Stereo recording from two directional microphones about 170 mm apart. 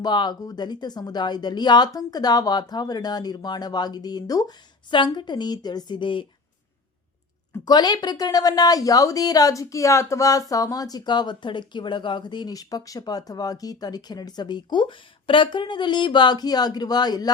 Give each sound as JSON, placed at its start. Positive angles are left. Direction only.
{"t": 0.0, "sound": "speech", "side_deg": 25}
{"t": 7.5, "sound": "speech", "side_deg": 25}